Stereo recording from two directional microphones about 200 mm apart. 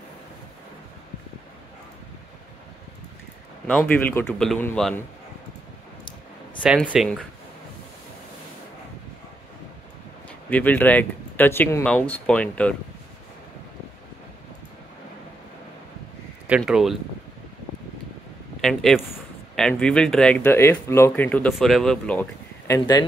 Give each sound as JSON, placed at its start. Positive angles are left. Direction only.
{"t": 3.6, "sound": "speech", "side_deg": 5}
{"t": 6.9, "sound": "speech", "side_deg": 0}
{"t": 10.5, "sound": "speech", "side_deg": 10}
{"t": 16.4, "sound": "speech", "side_deg": -5}
{"t": 18.6, "sound": "speech", "side_deg": 0}